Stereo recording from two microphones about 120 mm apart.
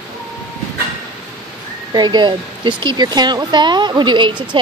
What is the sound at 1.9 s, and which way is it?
Speech, 40° right (ahead or behind).